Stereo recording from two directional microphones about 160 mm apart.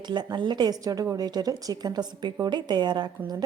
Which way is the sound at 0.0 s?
25° right (ahead or behind).